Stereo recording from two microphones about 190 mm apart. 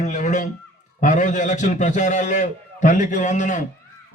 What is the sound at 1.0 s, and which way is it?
A man's voice, 40° left (ahead or behind).